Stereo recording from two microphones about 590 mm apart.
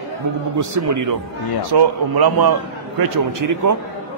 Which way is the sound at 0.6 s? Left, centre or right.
Right.